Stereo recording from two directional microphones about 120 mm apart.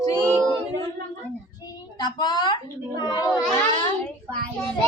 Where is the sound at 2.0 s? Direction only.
35° left (ahead or behind).